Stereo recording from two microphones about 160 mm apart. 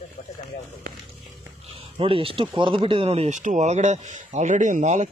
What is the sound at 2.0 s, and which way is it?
Speech, 35° right (ahead or behind).